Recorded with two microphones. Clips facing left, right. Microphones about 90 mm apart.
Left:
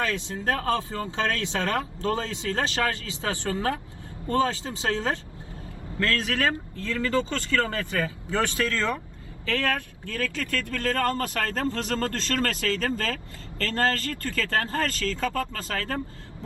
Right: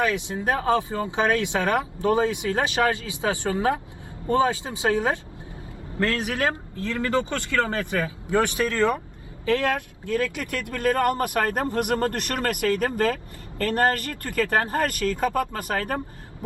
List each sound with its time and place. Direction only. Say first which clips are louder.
0.0 s speech: right 3 dB; 15° right (ahead or behind)